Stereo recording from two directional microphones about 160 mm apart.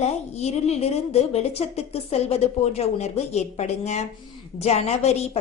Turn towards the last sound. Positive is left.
turn(degrees=40)  # may be behind; listen again after turning